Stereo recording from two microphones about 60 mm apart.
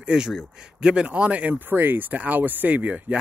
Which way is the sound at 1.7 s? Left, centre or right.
Right.